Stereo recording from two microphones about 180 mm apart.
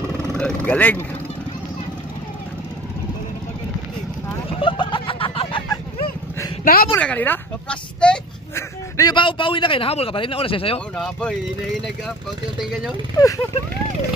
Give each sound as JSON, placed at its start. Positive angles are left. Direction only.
{"t": 0.4, "sound": "speech", "side_deg": 5}
{"t": 4.5, "sound": "a sound", "side_deg": 30}
{"t": 6.6, "sound": "speech", "side_deg": 55}
{"t": 7.0, "sound": "speech", "side_deg": 10}
{"t": 8.9, "sound": "a man's voice", "side_deg": 25}
{"t": 11.0, "sound": "speech", "side_deg": 5}